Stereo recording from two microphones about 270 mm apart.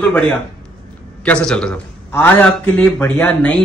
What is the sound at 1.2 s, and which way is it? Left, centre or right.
A man's voice, centre.